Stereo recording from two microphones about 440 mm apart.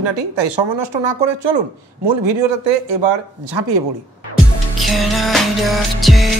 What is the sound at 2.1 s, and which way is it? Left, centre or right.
Speech, right.